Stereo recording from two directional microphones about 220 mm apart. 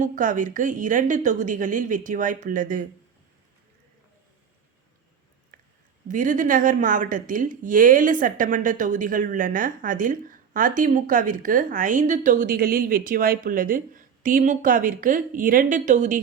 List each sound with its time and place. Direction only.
0.0 s speech: 35° right (ahead or behind)
6.1 s speech: 35° right (ahead or behind)